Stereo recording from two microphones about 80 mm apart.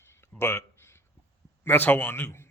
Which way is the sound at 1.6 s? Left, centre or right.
Left.